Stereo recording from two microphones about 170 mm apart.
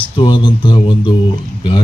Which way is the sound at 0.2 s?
25° left (ahead or behind).